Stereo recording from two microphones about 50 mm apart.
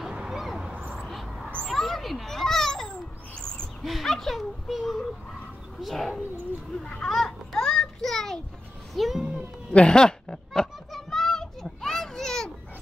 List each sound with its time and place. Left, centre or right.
0.0 s a sound: centre
1.7 s children playing: centre
3.3 s owl: centre
3.8 s a child's voice: centre
7.0 s children playing: centre
8.9 s a child's voice: centre
9.7 s a sound: centre